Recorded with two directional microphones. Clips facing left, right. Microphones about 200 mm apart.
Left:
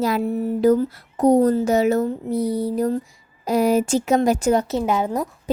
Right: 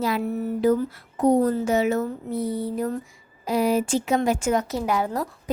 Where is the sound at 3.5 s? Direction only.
45° left (ahead or behind).